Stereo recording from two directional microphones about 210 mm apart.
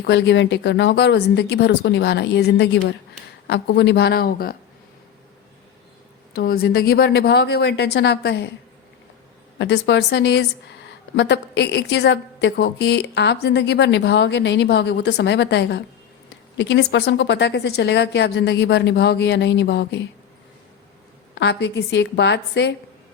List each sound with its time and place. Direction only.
0.0 s a woman's voice: 55° left (ahead or behind)
6.3 s a woman's voice: 45° left (ahead or behind)
9.6 s a woman's voice: 55° left (ahead or behind)
21.3 s a woman's voice: 55° left (ahead or behind)